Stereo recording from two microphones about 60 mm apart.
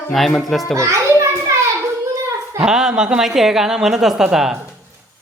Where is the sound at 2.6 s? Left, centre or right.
Centre.